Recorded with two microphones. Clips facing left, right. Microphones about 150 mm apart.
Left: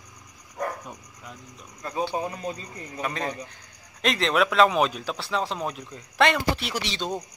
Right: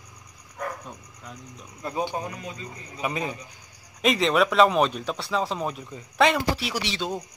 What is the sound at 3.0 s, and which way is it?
Speech, 10° right (ahead or behind).